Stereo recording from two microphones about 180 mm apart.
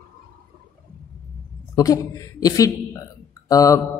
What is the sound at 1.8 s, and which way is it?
A woman's voice, 20° left (ahead or behind).